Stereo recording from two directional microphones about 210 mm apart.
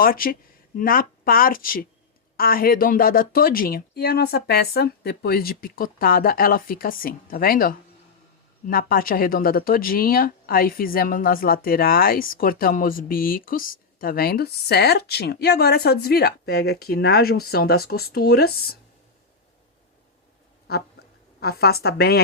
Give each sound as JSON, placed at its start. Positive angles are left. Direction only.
{"t": 0.0, "sound": "speech", "side_deg": 45}
{"t": 21.4, "sound": "speech", "side_deg": 50}